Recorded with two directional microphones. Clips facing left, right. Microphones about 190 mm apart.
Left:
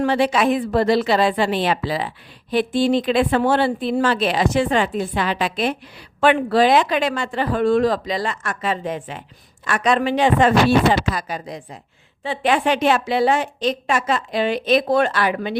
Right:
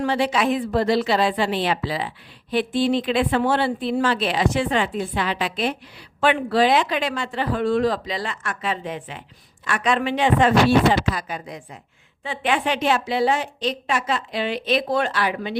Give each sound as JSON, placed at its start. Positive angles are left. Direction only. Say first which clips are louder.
{"t": 0.0, "sound": "a woman's voice", "louder": "left 3 dB", "side_deg": 50}